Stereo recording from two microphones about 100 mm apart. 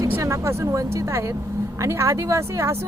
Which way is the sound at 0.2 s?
30° right (ahead or behind).